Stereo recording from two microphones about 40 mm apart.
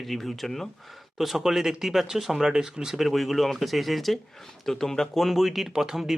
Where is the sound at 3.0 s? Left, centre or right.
Centre.